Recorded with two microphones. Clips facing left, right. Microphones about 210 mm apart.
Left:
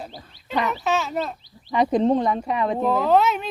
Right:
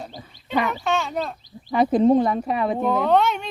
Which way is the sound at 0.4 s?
Centre (ahead or behind).